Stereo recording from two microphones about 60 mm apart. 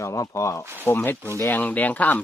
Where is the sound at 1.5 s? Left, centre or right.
Left.